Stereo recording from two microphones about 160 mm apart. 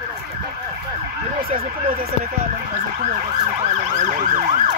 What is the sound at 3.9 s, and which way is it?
Emergency vehicle, 50° right (ahead or behind).